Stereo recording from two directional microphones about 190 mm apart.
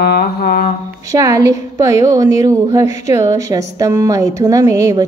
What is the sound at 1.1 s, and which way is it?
A woman's voice, 15° right (ahead or behind).